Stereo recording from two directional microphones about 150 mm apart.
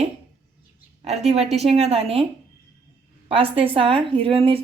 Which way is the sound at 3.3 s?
40° right (ahead or behind).